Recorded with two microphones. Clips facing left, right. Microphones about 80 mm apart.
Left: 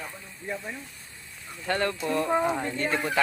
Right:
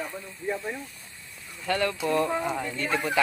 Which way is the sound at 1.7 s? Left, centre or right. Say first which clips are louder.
Right 1 dB; left.